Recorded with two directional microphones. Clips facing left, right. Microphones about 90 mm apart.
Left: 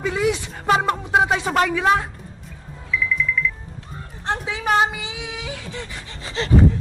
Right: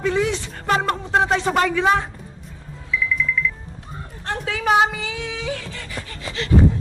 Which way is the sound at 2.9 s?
Centre (ahead or behind).